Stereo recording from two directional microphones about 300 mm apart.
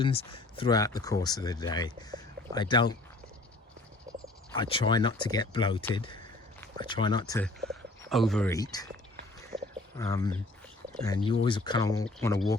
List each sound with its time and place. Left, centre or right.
0.0 s speech: centre
4.5 s speech: centre
9.6 s a sound: centre
10.9 s speech: centre